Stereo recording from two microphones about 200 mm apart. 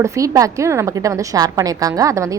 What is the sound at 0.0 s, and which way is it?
A woman's voice, 15° right (ahead or behind).